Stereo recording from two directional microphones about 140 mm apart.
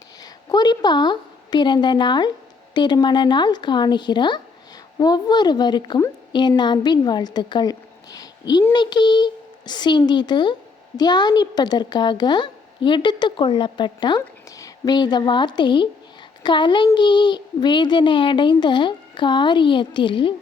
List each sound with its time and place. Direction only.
0.2 s a woman's voice: 30° left (ahead or behind)